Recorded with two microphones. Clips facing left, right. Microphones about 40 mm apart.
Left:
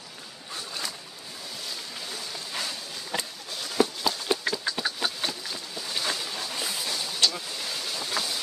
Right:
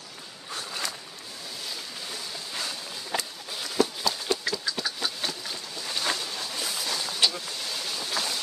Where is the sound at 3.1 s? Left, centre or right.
Centre.